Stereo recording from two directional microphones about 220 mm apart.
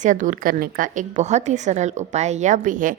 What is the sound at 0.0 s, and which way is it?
A woman's voice, 35° right (ahead or behind).